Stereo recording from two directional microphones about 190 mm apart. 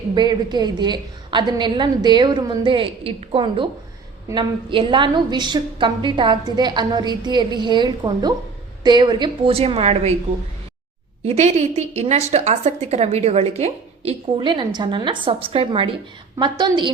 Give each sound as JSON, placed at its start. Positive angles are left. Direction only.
{"t": 0.1, "sound": "a woman's voice", "side_deg": -25}
{"t": 11.3, "sound": "a woman's voice", "side_deg": -35}